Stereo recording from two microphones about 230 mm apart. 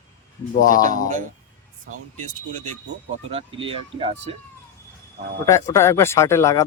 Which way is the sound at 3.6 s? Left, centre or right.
Right.